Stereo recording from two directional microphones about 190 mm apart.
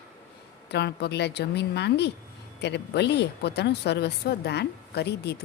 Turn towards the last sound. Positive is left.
turn(degrees=60)  # may be behind; listen again after turning